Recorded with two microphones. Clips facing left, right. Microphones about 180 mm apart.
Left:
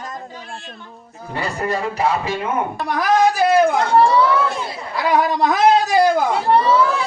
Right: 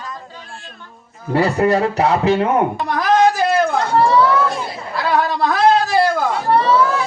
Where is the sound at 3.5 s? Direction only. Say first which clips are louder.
Left 2 dB; 15° left (ahead or behind).